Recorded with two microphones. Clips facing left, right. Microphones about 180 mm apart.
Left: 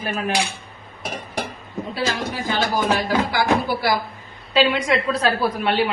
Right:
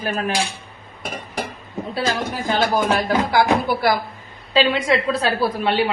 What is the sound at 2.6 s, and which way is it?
Speech, 50° right (ahead or behind).